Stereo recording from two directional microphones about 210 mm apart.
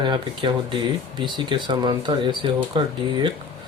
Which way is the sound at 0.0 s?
20° right (ahead or behind).